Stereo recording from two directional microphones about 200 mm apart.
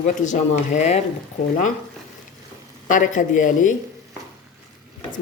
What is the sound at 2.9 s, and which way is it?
Speech, 40° left (ahead or behind).